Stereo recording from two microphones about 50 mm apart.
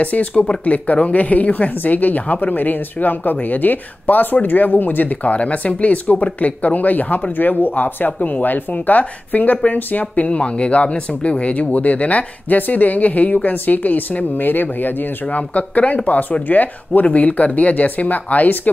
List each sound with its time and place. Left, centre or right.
0.0 s speech: left